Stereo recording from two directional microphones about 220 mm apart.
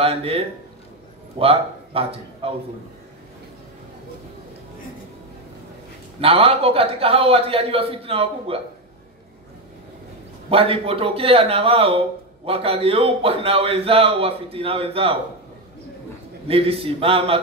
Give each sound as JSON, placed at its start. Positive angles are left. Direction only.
{"t": 0.0, "sound": "a man's voice", "side_deg": -25}
{"t": 1.4, "sound": "speech", "side_deg": -25}
{"t": 6.2, "sound": "a man's voice", "side_deg": -25}
{"t": 10.5, "sound": "a man's voice", "side_deg": -25}
{"t": 16.4, "sound": "a man's voice", "side_deg": -25}